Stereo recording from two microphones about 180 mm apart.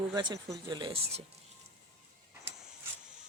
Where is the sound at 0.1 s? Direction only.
25° right (ahead or behind).